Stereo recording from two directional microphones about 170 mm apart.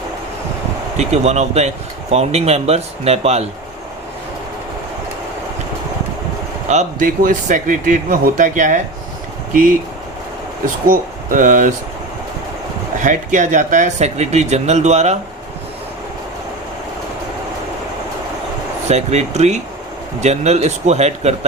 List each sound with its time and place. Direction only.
0.9 s speech: 40° right (ahead or behind)
6.7 s speech: 50° right (ahead or behind)
10.8 s speech: 50° right (ahead or behind)
13.0 s speech: 45° right (ahead or behind)
18.9 s speech: 40° right (ahead or behind)